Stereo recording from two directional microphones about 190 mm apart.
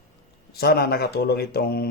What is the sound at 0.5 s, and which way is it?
Speech, 55° left (ahead or behind).